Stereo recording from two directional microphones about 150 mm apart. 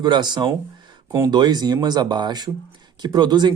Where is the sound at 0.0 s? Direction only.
30° right (ahead or behind).